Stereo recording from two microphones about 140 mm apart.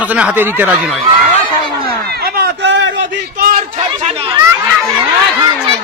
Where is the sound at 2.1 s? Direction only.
90° right.